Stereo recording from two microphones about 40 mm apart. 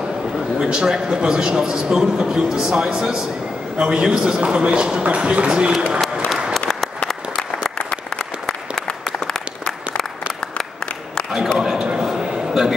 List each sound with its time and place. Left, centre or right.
0.6 s a man's voice: centre
7.1 s applause: centre
11.5 s a sound: centre